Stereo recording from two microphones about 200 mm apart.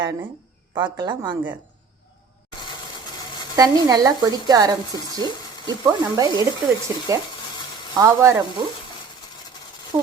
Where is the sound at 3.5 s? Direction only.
20° right (ahead or behind).